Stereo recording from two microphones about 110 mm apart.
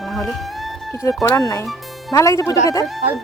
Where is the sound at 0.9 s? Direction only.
30° left (ahead or behind).